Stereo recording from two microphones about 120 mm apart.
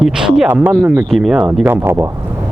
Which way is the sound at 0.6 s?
25° right (ahead or behind).